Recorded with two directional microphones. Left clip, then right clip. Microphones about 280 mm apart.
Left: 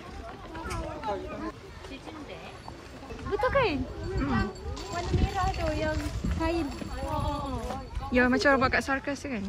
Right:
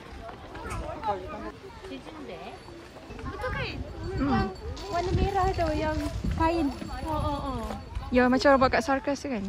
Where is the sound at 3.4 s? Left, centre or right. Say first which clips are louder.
Left 8 dB; centre.